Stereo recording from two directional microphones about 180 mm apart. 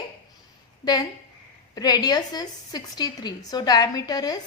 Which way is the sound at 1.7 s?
20° left (ahead or behind).